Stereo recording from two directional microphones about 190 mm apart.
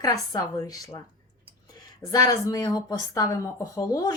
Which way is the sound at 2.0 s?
20° left (ahead or behind).